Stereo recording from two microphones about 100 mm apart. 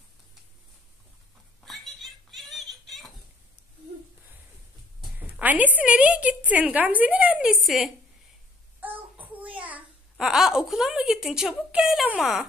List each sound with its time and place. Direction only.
1.6 s a sound: centre (ahead or behind)
5.2 s speech: 15° right (ahead or behind)
7.6 s speech: centre (ahead or behind)
8.8 s child singing: 15° right (ahead or behind)
10.1 s speech: 5° right (ahead or behind)